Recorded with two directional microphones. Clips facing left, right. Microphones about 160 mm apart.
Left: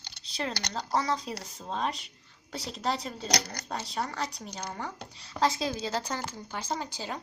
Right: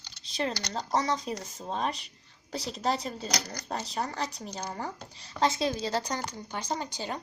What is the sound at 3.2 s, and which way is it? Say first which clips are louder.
Speech: left 2 dB; 70° left (ahead or behind).